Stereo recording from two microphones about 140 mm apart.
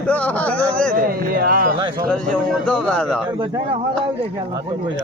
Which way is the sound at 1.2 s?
90° right.